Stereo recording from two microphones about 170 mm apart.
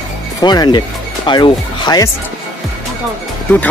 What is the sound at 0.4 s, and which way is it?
Speech, 25° left (ahead or behind).